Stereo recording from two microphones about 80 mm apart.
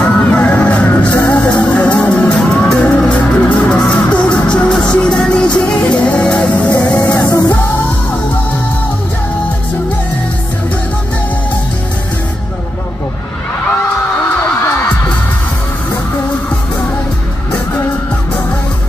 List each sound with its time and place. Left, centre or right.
0.0 s music: centre